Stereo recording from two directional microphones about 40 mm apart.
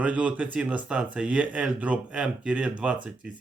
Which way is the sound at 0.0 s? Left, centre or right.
Right.